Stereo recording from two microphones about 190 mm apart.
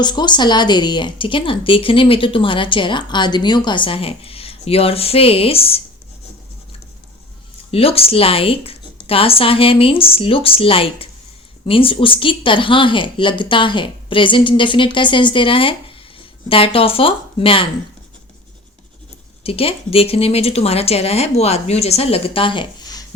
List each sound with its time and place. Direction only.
0.0 s a woman's voice: 25° left (ahead or behind)
7.7 s a woman's voice: 30° left (ahead or behind)
19.4 s speech: 30° left (ahead or behind)